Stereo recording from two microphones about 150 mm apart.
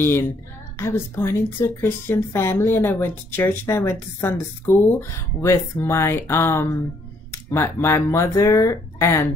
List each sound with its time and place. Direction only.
0.0 s a woman's voice: 15° left (ahead or behind)